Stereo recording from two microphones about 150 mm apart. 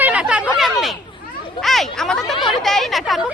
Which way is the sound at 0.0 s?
10° right (ahead or behind).